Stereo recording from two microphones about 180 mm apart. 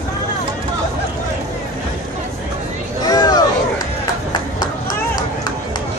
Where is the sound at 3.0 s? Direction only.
20° left (ahead or behind).